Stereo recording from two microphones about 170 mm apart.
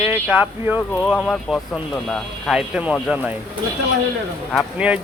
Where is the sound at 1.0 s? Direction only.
5° right (ahead or behind).